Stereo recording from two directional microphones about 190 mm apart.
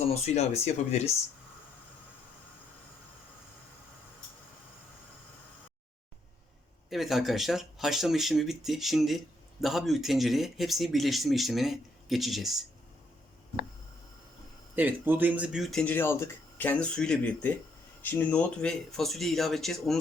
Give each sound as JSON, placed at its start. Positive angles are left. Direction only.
{"t": 0.1, "sound": "speech", "side_deg": 35}
{"t": 6.9, "sound": "speech", "side_deg": 0}
{"t": 14.8, "sound": "speech", "side_deg": -10}